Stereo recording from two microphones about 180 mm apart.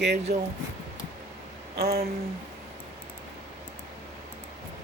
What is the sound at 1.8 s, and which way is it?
Speech, 60° right (ahead or behind).